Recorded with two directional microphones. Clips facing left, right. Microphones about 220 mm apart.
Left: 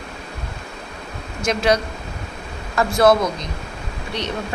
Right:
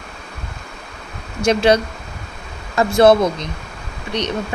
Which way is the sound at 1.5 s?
25° right (ahead or behind).